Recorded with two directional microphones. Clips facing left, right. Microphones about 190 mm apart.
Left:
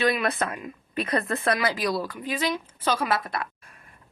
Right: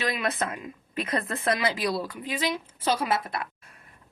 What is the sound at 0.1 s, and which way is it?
Speech, 20° right (ahead or behind).